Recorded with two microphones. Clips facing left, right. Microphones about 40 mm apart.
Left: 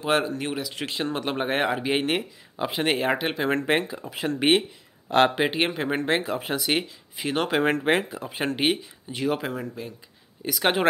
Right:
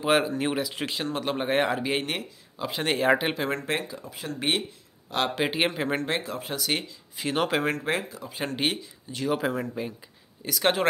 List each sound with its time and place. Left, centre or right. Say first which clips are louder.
0.0 s speech: right 1 dB; centre
1.0 s speech: left 2 dB; centre
2.9 s speech: right 3 dB; centre
3.4 s speech: left 5 dB; left
4.1 s speech: left 11 dB; left
4.4 s speech: left 6 dB; left
5.5 s speech: left 1 dB; centre
5.9 s speech: left 4 dB; left
7.2 s speech: left 1 dB; centre
7.6 s speech: left 5 dB; left
8.5 s speech: left 3 dB; centre
10.4 s speech: left 1 dB; centre